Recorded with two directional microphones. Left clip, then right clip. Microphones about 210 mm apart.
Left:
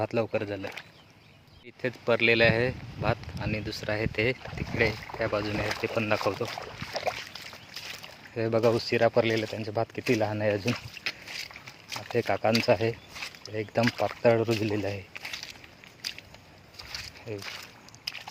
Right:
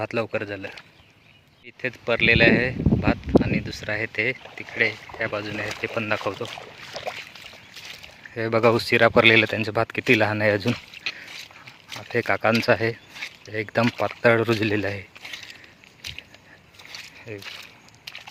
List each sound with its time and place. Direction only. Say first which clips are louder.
0.0 s speech: right 2 dB; centre (ahead or behind)
11.9 s a sound: right 3 dB; centre (ahead or behind)
12.2 s speech: right 5 dB; 10° right (ahead or behind)